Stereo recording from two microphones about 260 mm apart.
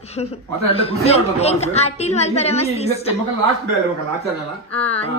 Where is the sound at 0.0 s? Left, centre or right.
Left.